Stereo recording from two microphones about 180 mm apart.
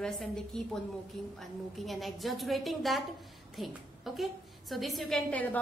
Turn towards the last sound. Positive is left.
turn(degrees=10)  # may be behind; listen again after turning